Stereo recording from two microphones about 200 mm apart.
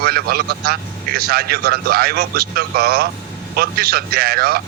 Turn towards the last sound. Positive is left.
turn(degrees=-50)  # may be behind; listen again after turning